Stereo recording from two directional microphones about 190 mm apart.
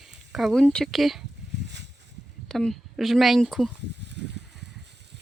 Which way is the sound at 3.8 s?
65° right (ahead or behind).